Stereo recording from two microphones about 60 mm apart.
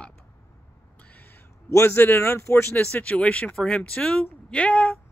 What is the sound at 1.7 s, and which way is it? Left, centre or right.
Speech, left.